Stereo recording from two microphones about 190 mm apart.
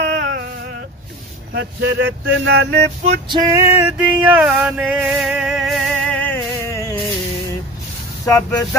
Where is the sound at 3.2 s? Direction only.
25° right (ahead or behind).